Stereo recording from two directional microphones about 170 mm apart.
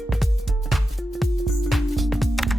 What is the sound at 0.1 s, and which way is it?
Music, centre (ahead or behind).